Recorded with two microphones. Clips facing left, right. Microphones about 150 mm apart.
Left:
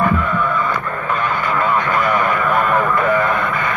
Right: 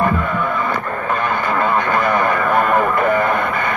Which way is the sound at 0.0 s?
35° right (ahead or behind).